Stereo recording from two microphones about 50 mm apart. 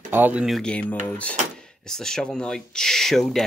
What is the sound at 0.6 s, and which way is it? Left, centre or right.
Speech, left.